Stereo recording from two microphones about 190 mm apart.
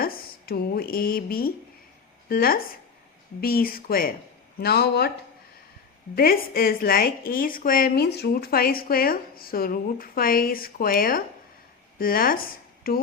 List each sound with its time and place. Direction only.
0.0 s a woman's voice: 50° left (ahead or behind)
6.1 s a woman's voice: 50° left (ahead or behind)